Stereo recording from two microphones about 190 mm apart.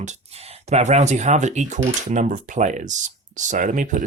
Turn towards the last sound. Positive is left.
turn(degrees=-40)  # may be behind; listen again after turning